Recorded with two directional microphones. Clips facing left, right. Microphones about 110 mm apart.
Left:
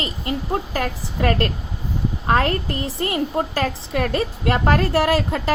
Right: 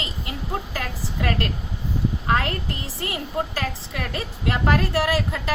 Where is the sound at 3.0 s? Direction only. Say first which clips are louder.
Left 5 dB; 25° left (ahead or behind).